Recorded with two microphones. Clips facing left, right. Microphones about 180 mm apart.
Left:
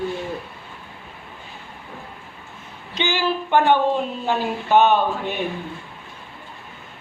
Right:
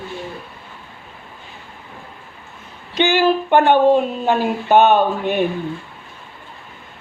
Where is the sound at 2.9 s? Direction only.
60° right (ahead or behind).